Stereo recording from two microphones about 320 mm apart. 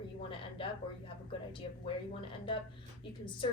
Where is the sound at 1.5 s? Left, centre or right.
Centre.